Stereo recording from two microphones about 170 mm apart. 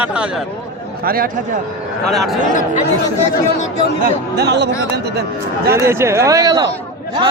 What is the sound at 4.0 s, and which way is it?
Speech, 75° right (ahead or behind).